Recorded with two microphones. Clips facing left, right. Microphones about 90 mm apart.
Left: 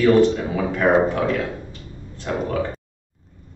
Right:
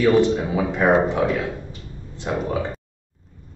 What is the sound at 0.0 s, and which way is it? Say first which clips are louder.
Speech: left 1 dB; 15° right (ahead or behind).